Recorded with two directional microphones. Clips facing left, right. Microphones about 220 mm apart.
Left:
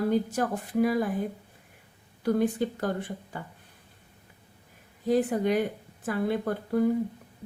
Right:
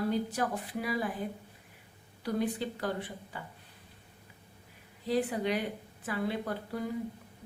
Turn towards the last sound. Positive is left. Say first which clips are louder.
# left 9 dB
turn(degrees=50)  # may be behind; listen again after turning